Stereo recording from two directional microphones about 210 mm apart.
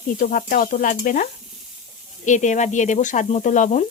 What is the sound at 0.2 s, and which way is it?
A woman's voice, 40° left (ahead or behind).